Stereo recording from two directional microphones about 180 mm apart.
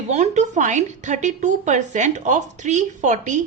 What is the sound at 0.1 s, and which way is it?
Speech, 40° right (ahead or behind).